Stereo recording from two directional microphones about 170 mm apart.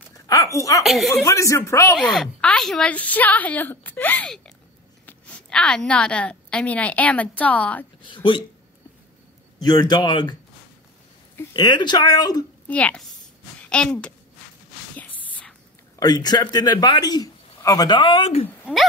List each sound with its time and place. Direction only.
0.3 s speech: 20° left (ahead or behind)
0.8 s speech: centre (ahead or behind)
1.1 s a woman's voice: 20° left (ahead or behind)
2.0 s a woman's voice: centre (ahead or behind)
8.0 s a man's voice: 30° left (ahead or behind)
9.6 s a man's voice: 25° left (ahead or behind)
11.3 s a man's voice: 25° left (ahead or behind)
12.6 s a woman's voice: 10° left (ahead or behind)
15.0 s a sound: 10° left (ahead or behind)
16.0 s a man's voice: 25° left (ahead or behind)